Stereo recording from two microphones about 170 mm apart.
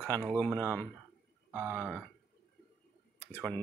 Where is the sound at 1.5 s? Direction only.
15° right (ahead or behind).